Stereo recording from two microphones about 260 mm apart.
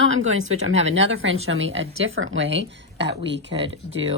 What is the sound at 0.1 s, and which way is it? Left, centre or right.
Speech, right.